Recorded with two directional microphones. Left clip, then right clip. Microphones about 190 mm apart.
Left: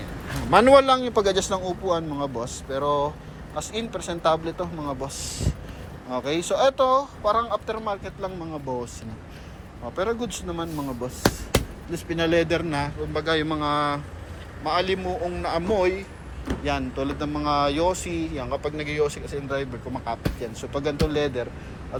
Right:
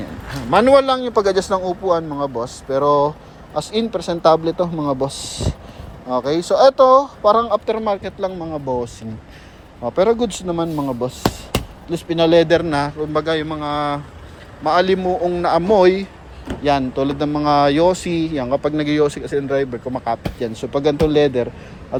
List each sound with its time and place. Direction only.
0.5 s speech: 20° right (ahead or behind); by 4.7 s 40° right (ahead or behind)
6.1 s speech: 30° right (ahead or behind)
9.8 s speech: 40° right (ahead or behind)
11.9 s speech: 30° right (ahead or behind); by 21.4 s 45° right (ahead or behind)